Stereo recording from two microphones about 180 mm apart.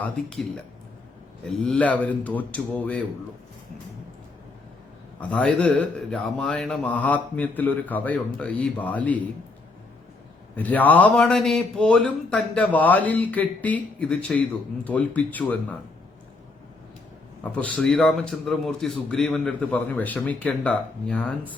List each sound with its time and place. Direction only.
0.0 s speech: 5° left (ahead or behind)
1.5 s a man's voice: 5° left (ahead or behind)
5.3 s a man's voice: 5° left (ahead or behind)
10.5 s a man's voice: 10° left (ahead or behind)
17.4 s a man's voice: 10° left (ahead or behind)